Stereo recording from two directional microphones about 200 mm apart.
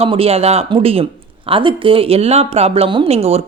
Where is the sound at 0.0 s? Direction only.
30° right (ahead or behind).